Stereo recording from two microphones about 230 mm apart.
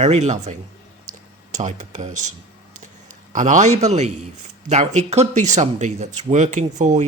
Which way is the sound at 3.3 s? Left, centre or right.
Right.